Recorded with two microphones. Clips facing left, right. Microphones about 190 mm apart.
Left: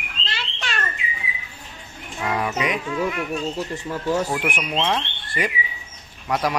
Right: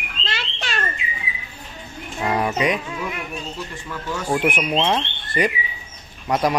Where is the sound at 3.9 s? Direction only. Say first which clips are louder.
Left 7 dB; 35° left (ahead or behind).